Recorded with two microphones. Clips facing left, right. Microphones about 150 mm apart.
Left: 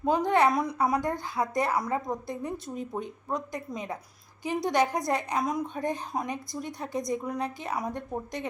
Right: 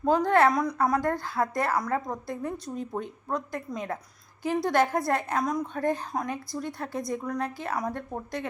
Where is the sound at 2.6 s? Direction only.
Centre (ahead or behind).